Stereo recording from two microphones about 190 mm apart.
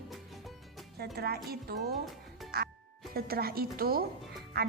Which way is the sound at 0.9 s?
55° right (ahead or behind).